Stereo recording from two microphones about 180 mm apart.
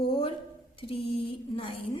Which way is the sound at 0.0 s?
30° left (ahead or behind).